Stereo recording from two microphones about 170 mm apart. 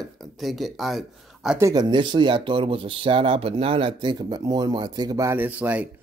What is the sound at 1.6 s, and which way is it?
Speech, 25° right (ahead or behind).